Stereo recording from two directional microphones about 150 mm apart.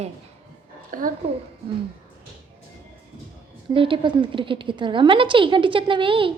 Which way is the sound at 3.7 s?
35° right (ahead or behind).